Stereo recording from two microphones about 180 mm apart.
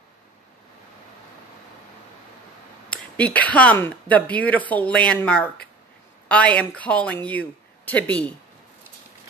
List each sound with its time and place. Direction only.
2.9 s speech: 10° left (ahead or behind)